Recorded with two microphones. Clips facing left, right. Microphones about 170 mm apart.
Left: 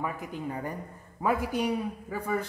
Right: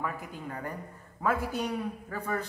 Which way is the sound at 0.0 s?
20° left (ahead or behind).